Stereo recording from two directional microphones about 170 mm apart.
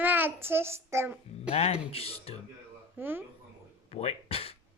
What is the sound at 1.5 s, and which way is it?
Speech, 35° left (ahead or behind).